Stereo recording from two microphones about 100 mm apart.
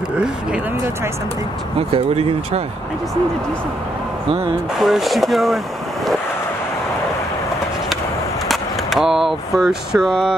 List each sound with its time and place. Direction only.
1.8 s speech: 75° right (ahead or behind)
4.7 s speech: 5° right (ahead or behind)
8.5 s speech: centre (ahead or behind)